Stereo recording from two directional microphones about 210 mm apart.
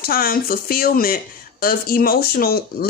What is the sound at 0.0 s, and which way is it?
Speech, 45° left (ahead or behind).